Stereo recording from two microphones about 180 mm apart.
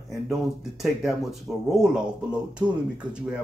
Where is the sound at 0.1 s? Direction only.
Centre (ahead or behind).